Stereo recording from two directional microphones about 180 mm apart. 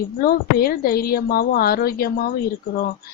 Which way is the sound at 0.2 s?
55° left (ahead or behind).